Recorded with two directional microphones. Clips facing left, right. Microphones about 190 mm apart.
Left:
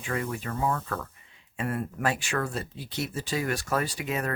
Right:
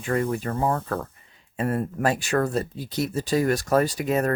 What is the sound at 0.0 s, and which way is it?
Speech, 40° right (ahead or behind).